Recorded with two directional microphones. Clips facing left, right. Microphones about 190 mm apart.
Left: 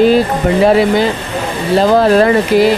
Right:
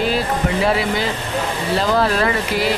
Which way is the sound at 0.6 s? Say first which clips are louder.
Left 12 dB; 45° left (ahead or behind).